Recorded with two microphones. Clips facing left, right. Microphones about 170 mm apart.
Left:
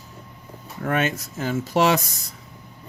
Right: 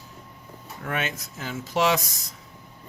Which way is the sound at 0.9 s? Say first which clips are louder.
Left 7 dB; 50° left (ahead or behind).